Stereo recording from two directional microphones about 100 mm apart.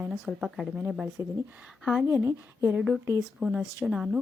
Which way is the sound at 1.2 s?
30° right (ahead or behind).